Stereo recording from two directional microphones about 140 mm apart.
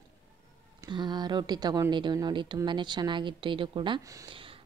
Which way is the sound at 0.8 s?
30° right (ahead or behind).